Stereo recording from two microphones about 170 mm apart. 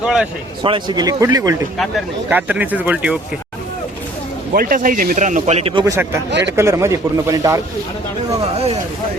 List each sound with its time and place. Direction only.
0.0 s speech: 5° right (ahead or behind)
0.6 s speech: 25° right (ahead or behind)
2.3 s a man's voice: 10° right (ahead or behind)
4.5 s a man's voice: 55° right (ahead or behind); by 5.8 s 35° right (ahead or behind)
5.8 s a man's voice: 20° right (ahead or behind)
8.5 s speech: 35° right (ahead or behind)